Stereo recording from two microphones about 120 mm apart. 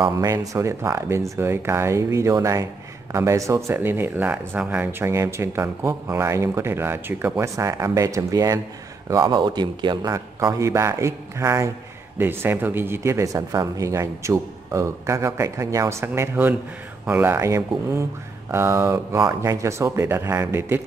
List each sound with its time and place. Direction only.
0.1 s speech: 30° right (ahead or behind)
10.1 s speech: 25° right (ahead or behind)